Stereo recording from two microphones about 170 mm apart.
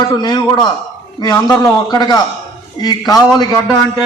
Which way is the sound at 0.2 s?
25° left (ahead or behind).